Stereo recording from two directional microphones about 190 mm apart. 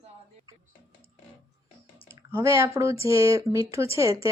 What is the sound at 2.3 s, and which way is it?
Speech, 15° right (ahead or behind).